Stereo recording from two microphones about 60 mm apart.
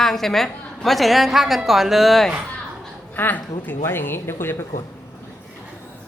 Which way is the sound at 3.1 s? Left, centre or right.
Left.